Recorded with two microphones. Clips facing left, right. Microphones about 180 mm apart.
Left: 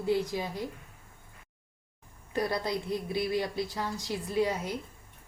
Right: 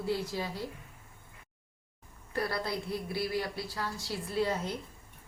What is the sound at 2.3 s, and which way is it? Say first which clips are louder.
A woman's voice: left 3 dB; 20° left (ahead or behind).